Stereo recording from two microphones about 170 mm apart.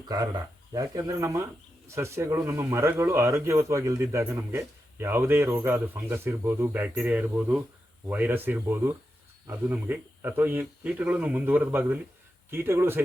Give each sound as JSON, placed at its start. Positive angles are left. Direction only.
{"t": 0.1, "sound": "speech", "side_deg": -20}